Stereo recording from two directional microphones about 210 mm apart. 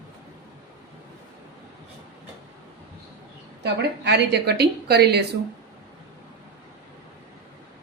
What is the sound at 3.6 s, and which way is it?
A woman's voice, 55° right (ahead or behind).